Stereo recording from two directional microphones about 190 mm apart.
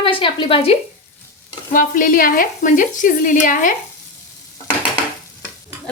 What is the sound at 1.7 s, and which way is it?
Speech, 45° left (ahead or behind).